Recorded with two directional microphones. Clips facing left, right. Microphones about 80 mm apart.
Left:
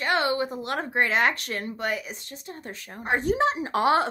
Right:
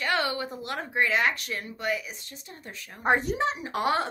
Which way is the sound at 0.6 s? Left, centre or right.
Left.